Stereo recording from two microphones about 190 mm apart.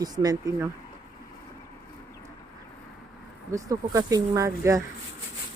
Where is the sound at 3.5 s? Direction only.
15° right (ahead or behind).